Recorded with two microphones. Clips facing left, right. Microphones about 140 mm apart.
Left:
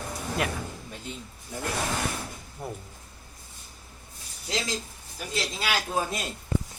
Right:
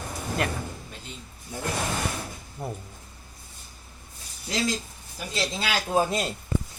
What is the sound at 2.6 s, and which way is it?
Speech, 10° right (ahead or behind).